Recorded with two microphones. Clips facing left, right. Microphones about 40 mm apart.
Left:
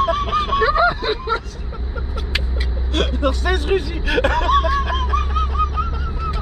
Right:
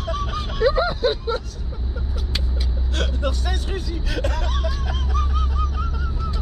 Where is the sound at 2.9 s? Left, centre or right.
Left.